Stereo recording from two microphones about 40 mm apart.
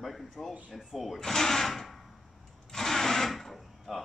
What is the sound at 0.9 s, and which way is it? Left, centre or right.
Speech, centre.